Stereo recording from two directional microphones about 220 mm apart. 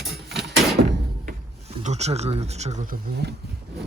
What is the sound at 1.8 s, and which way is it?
Speech, 30° right (ahead or behind).